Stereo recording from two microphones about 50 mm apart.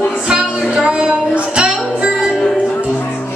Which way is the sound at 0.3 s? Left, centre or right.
Centre.